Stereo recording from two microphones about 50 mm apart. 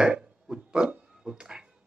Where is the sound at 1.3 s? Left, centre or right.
Right.